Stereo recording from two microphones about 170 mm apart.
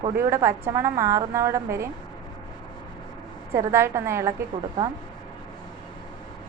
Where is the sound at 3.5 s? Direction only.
15° right (ahead or behind).